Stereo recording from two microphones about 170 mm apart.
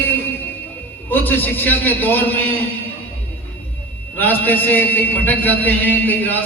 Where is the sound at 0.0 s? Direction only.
10° left (ahead or behind).